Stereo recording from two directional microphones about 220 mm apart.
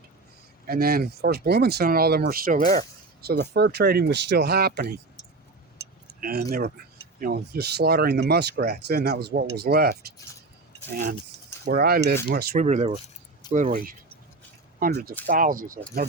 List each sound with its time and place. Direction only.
0.7 s speech: 45° right (ahead or behind)
6.1 s speech: 40° right (ahead or behind)
12.6 s speech: 30° right (ahead or behind)